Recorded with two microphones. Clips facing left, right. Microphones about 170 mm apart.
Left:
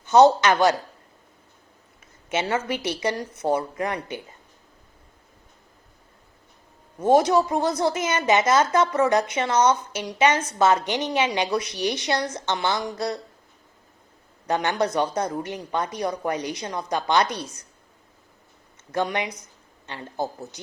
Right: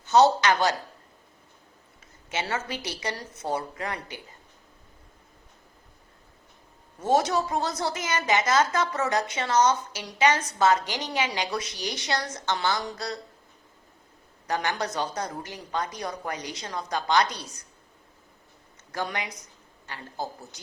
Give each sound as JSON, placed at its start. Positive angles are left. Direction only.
{"t": 0.2, "sound": "a woman's voice", "side_deg": 20}
{"t": 2.3, "sound": "a woman's voice", "side_deg": 20}
{"t": 7.2, "sound": "a woman's voice", "side_deg": 20}
{"t": 14.4, "sound": "a woman's voice", "side_deg": 20}
{"t": 18.9, "sound": "a woman's voice", "side_deg": 25}